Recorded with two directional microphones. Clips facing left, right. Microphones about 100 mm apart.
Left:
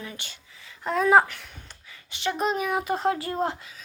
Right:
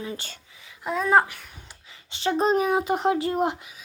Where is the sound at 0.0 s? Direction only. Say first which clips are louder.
Right 5 dB; 30° right (ahead or behind).